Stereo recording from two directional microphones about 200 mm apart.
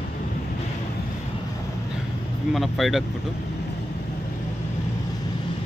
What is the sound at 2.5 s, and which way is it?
Speech, centre (ahead or behind).